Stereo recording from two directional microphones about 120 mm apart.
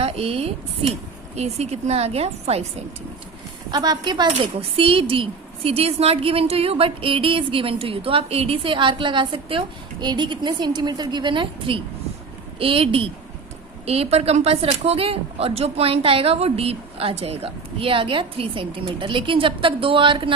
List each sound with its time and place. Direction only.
0.0 s a woman's voice: 55° right (ahead or behind)
3.7 s a woman's voice: 35° right (ahead or behind)
4.8 s a woman's voice: 50° right (ahead or behind)